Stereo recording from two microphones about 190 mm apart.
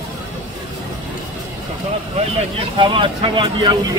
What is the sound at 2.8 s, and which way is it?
Speech, 25° right (ahead or behind).